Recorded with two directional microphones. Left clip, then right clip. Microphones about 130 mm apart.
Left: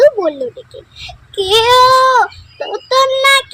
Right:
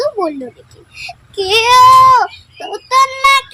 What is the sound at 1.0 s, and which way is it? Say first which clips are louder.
A child's voice: left 1 dB; 30° right (ahead or behind).